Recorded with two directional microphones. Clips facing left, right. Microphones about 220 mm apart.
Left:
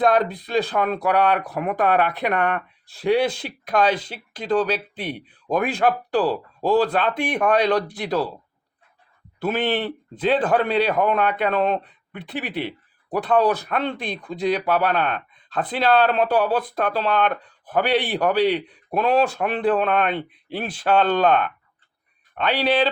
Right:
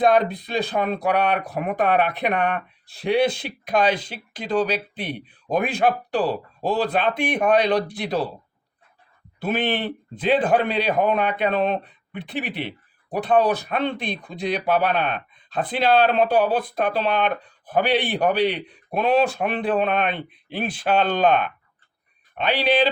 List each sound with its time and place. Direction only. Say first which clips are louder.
0.4 s speech: left 2 dB; 20° right (ahead or behind)
9.4 s speech: left 1 dB; 15° right (ahead or behind)